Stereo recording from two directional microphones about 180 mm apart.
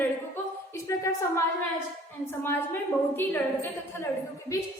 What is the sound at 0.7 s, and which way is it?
Speech, 15° left (ahead or behind).